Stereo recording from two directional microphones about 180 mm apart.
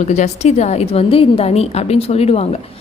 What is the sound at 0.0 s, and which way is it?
A woman's voice, 40° left (ahead or behind).